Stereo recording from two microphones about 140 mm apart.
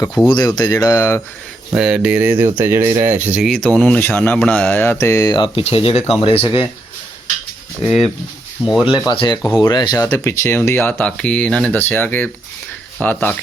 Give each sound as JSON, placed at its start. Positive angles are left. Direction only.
{"t": 0.3, "sound": "speech", "side_deg": 30}
{"t": 1.7, "sound": "speech", "side_deg": -5}
{"t": 3.5, "sound": "speech", "side_deg": 5}
{"t": 5.6, "sound": "speech", "side_deg": 45}
{"t": 7.9, "sound": "speech", "side_deg": 0}
{"t": 9.1, "sound": "speech", "side_deg": 35}